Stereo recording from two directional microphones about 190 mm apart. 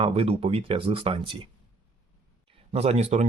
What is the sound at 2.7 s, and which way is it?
Speech, 35° right (ahead or behind).